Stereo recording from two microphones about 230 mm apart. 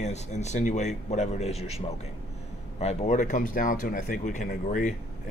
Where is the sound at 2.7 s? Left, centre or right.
Left.